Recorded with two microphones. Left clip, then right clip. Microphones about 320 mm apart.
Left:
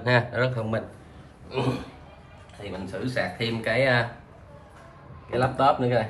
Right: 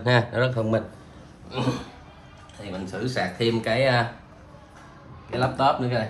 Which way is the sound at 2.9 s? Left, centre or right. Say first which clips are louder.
Right 1 dB; centre.